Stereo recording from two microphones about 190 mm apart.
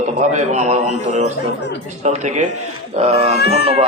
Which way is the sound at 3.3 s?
55° left (ahead or behind).